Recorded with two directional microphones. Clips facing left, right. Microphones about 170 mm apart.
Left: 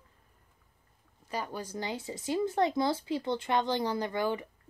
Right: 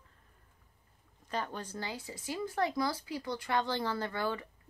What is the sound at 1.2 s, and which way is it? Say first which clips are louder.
Speech: left 1 dB; 10° left (ahead or behind).